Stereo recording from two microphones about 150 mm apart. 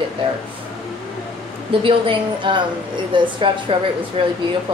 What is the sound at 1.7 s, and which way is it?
A woman's voice, 35° right (ahead or behind).